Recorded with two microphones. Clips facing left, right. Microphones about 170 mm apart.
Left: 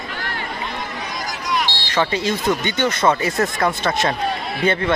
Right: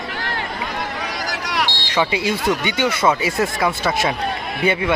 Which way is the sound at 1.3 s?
85° right.